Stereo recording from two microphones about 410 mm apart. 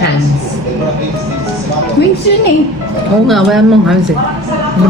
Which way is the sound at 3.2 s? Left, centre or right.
Centre.